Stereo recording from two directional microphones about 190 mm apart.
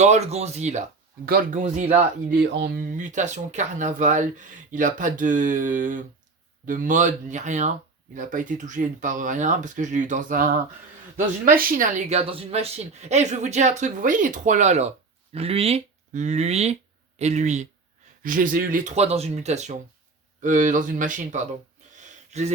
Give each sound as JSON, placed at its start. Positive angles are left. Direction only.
{"t": 0.0, "sound": "a woman's voice", "side_deg": -35}
{"t": 1.2, "sound": "a woman's voice", "side_deg": -45}
{"t": 2.4, "sound": "a woman's voice", "side_deg": -60}